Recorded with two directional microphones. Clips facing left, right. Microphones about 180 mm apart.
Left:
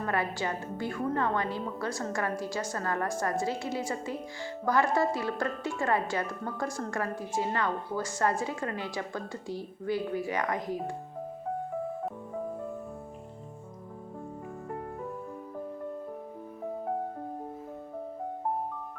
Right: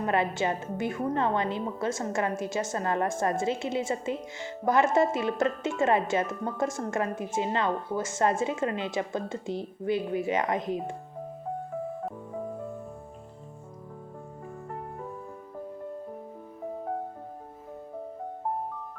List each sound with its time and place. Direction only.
0.0 s a woman's voice: 20° right (ahead or behind)